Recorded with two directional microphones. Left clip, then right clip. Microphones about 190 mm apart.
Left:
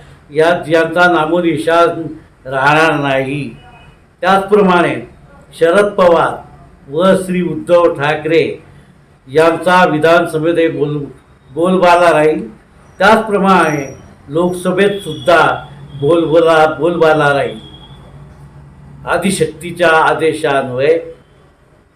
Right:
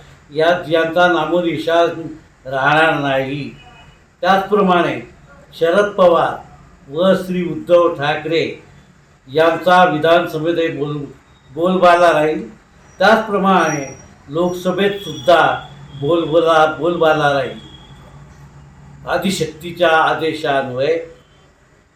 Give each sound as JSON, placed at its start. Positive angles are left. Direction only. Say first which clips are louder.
{"t": 0.3, "sound": "a man's voice", "louder": "left 3 dB", "side_deg": 0}
{"t": 19.0, "sound": "a man's voice", "louder": "left 5 dB", "side_deg": 0}